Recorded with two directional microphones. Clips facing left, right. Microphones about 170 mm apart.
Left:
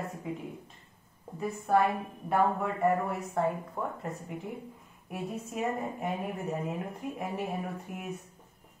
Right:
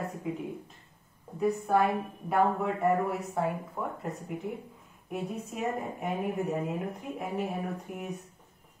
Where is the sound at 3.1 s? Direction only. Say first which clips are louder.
Left 1 dB; centre (ahead or behind).